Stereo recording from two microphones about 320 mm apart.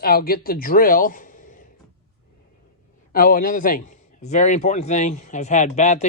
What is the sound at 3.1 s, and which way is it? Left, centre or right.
A man's voice, left.